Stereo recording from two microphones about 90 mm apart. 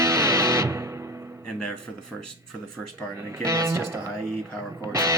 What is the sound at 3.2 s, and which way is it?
Speech, 30° right (ahead or behind).